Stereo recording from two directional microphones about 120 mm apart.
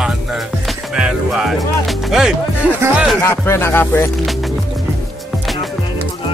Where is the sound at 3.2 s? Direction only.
20° left (ahead or behind).